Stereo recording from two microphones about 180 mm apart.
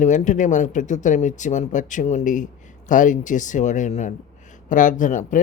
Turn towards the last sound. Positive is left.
turn(degrees=45)  # may be behind; listen again after turning